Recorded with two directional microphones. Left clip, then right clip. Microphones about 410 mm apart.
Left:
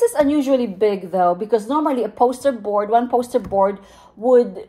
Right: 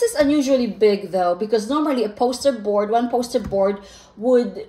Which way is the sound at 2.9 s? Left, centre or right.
Left.